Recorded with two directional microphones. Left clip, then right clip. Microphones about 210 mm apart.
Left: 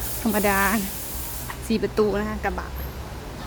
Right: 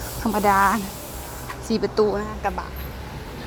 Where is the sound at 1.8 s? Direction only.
15° left (ahead or behind).